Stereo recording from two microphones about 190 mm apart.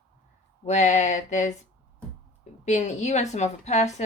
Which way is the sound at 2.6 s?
40° left (ahead or behind).